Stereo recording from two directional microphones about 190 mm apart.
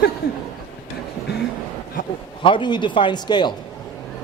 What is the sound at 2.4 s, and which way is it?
Speech, 25° left (ahead or behind).